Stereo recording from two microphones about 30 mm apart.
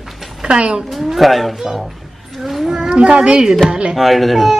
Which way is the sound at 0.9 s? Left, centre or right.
Centre.